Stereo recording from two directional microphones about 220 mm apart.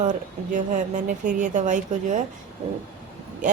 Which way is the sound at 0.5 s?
35° right (ahead or behind).